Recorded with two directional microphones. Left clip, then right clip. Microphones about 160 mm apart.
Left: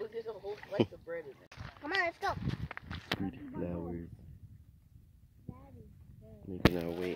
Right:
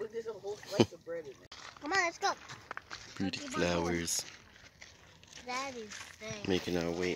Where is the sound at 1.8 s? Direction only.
30° right (ahead or behind).